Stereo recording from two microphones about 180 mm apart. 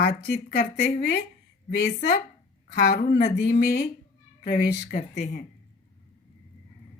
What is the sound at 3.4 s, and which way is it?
Speech, 60° left (ahead or behind).